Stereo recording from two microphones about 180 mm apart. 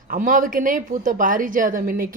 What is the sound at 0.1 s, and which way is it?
Speech, 50° right (ahead or behind).